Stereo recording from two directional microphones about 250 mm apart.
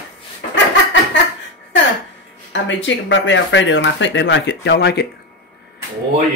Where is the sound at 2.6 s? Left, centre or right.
Left.